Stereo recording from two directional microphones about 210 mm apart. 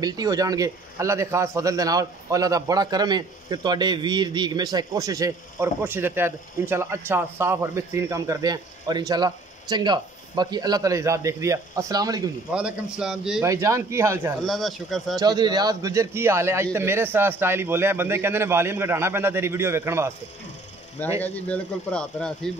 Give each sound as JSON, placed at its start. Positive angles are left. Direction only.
{"t": 0.0, "sound": "a man's voice", "side_deg": -20}
{"t": 12.5, "sound": "speech", "side_deg": -5}
{"t": 13.5, "sound": "a man's voice", "side_deg": -15}
{"t": 14.4, "sound": "speech", "side_deg": 0}
{"t": 15.1, "sound": "a man's voice", "side_deg": -20}
{"t": 21.2, "sound": "speech", "side_deg": 5}